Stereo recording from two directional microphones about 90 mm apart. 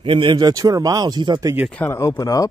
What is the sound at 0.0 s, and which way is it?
Speech, 70° right (ahead or behind).